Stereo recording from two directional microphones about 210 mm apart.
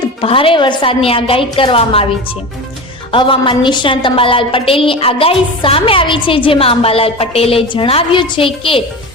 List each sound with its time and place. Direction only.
0.0 s a woman's voice: 25° left (ahead or behind)